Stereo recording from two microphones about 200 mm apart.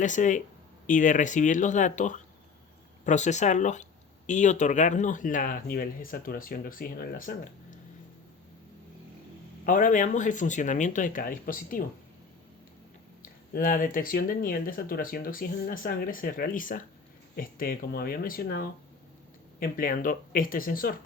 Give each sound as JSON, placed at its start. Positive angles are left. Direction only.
{"t": 0.0, "sound": "speech", "side_deg": 40}
{"t": 9.6, "sound": "speech", "side_deg": 40}
{"t": 13.5, "sound": "speech", "side_deg": 45}